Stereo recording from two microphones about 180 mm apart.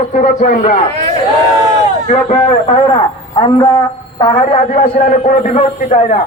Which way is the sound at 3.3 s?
25° left (ahead or behind).